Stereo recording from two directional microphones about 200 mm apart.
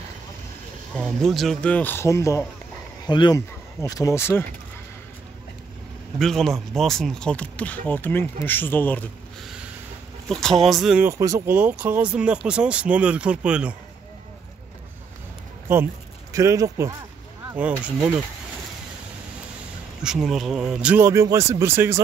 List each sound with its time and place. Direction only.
0.9 s speech: centre (ahead or behind)
6.1 s speech: centre (ahead or behind)
15.7 s speech: 15° right (ahead or behind)
20.0 s speech: 5° right (ahead or behind)